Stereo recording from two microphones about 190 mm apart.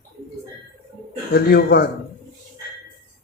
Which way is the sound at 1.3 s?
55° left (ahead or behind).